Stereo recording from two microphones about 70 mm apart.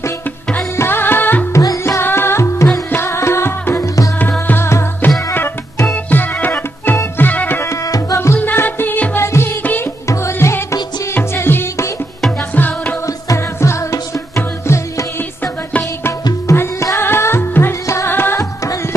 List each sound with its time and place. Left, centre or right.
0.7 s music: left
1.5 s music: left
2.0 s music: left
6.0 s organ: left
7.2 s music: left
7.7 s music: left
8.6 s music: left
9.2 s music: left
9.6 s music: left
10.0 s music: left
12.5 s music: left
13.0 s music: left